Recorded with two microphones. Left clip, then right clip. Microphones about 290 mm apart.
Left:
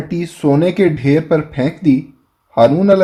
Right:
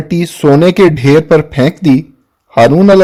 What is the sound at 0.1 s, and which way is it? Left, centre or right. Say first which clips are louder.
Speech: right 7 dB; right.